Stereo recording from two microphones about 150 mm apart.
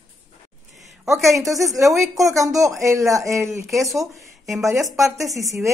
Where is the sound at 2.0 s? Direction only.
20° right (ahead or behind).